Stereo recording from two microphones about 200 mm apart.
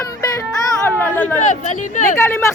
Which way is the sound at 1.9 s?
40° left (ahead or behind).